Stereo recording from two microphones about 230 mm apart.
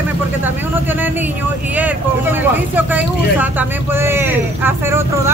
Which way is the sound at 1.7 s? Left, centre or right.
Centre.